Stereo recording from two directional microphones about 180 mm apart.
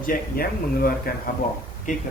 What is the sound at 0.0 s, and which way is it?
Speech, 50° left (ahead or behind).